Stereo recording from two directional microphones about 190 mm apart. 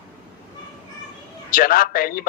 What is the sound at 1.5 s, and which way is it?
Speech, 50° left (ahead or behind).